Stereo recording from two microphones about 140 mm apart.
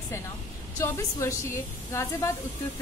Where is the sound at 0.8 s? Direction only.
20° left (ahead or behind).